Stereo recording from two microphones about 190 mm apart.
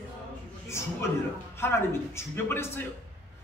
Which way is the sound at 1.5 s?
15° left (ahead or behind).